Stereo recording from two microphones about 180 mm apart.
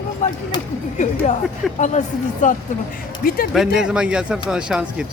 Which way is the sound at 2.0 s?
40° left (ahead or behind).